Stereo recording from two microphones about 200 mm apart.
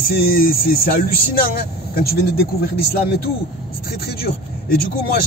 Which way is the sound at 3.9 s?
50° left (ahead or behind).